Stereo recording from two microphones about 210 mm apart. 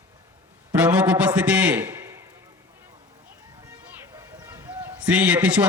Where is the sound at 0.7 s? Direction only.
5° right (ahead or behind).